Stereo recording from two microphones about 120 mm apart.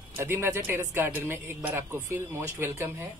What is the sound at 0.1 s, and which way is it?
Speech, 20° right (ahead or behind).